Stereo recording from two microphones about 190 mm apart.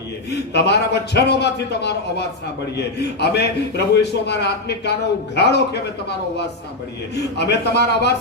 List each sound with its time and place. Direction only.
0.3 s a man's voice: 60° left (ahead or behind)